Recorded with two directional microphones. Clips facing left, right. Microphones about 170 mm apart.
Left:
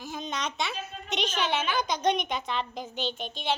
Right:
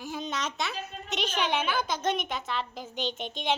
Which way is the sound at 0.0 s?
10° right (ahead or behind).